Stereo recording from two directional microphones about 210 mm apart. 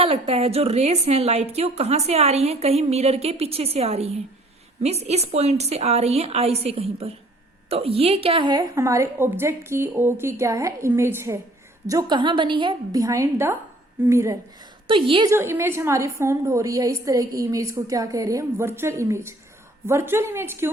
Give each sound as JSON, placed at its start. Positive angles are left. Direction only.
{"t": 0.0, "sound": "a woman's voice", "side_deg": -30}
{"t": 14.8, "sound": "a woman's voice", "side_deg": -25}
{"t": 15.3, "sound": "a woman's voice", "side_deg": -10}